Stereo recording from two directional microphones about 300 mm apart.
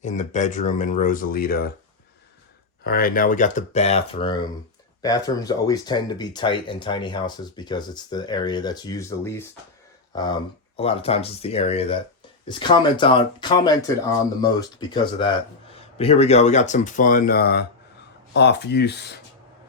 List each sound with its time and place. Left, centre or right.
0.0 s speech: left
2.8 s speech: left